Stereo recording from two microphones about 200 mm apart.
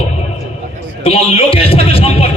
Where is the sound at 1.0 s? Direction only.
30° left (ahead or behind).